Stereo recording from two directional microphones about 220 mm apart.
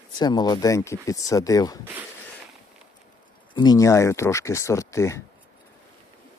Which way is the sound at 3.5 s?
15° left (ahead or behind).